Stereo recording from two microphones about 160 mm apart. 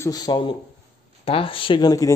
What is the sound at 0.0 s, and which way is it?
Speech, 25° left (ahead or behind).